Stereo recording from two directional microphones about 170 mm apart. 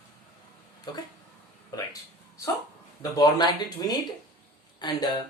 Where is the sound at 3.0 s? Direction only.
25° left (ahead or behind).